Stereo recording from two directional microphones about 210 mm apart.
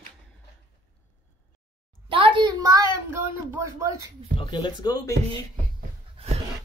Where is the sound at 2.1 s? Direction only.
25° right (ahead or behind).